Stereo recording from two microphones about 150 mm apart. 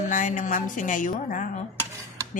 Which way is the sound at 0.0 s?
55° left (ahead or behind).